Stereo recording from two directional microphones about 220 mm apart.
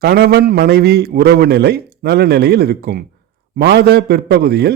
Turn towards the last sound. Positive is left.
turn(degrees=-45)  # may be behind; listen again after turning